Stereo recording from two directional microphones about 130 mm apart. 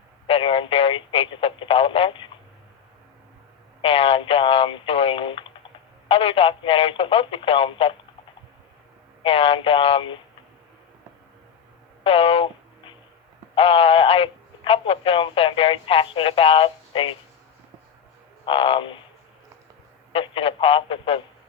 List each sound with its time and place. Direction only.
0.3 s speech: 40° left (ahead or behind)
3.8 s speech: 45° left (ahead or behind)
9.2 s speech: 45° left (ahead or behind)
12.0 s a sound: 45° left (ahead or behind)
13.6 s speech: 45° left (ahead or behind)
18.4 s a sound: 45° left (ahead or behind)
20.1 s speech: 45° left (ahead or behind)